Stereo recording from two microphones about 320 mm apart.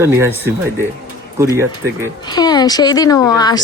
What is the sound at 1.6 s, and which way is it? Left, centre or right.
Speech, centre.